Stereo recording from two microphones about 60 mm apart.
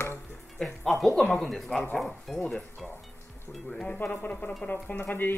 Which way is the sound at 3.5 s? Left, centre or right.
Centre.